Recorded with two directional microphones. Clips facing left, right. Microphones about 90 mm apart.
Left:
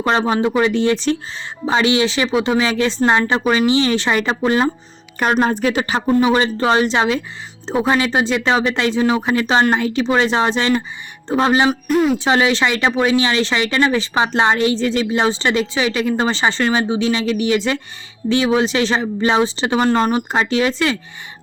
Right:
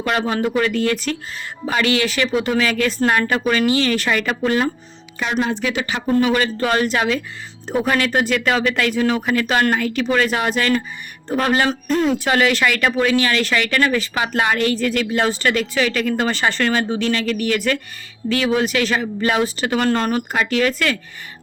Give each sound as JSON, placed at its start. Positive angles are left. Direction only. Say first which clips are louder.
{"t": 0.0, "sound": "speech", "louder": "left 3 dB", "side_deg": 25}
{"t": 5.2, "sound": "speech", "louder": "left 5 dB", "side_deg": 45}
{"t": 6.1, "sound": "speech", "louder": "left 1 dB", "side_deg": 20}
{"t": 11.9, "sound": "speech", "louder": "left 1 dB", "side_deg": 5}
{"t": 12.1, "sound": "speech", "louder": "left 2 dB", "side_deg": 20}